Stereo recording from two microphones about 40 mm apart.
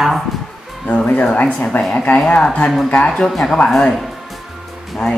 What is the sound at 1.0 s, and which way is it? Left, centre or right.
Speech, left.